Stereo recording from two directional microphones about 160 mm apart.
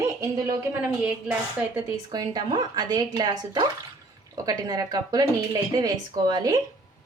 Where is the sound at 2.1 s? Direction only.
25° right (ahead or behind).